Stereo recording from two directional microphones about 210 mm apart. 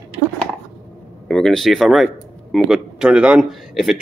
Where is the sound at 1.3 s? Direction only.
Centre (ahead or behind).